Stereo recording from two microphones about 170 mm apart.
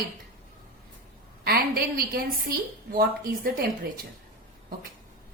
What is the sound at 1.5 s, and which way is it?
A woman's voice, 60° right (ahead or behind).